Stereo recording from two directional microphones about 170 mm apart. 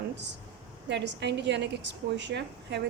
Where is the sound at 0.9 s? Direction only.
90° right.